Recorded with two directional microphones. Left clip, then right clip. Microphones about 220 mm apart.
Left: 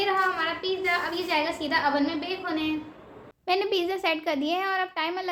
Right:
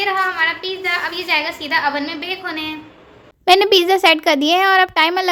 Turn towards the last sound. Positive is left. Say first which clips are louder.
# right 14 dB
turn(degrees=-50)  # may be behind; listen again after turning